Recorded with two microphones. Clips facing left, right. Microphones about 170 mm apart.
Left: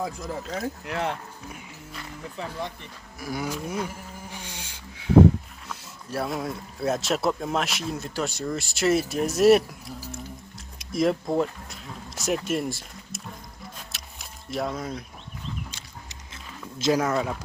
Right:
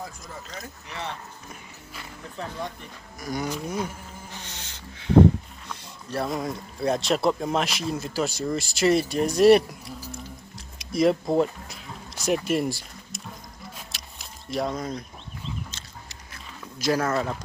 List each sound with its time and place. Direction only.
0.6 s speech: 60° left (ahead or behind)
2.4 s speech: 5° left (ahead or behind)
4.3 s a sound: 10° left (ahead or behind)
5.6 s speech: 5° left (ahead or behind)
10.8 s a sound: centre (ahead or behind)
14.5 s speech: 5° left (ahead or behind)
15.7 s biting: 20° left (ahead or behind)
17.1 s speech: centre (ahead or behind)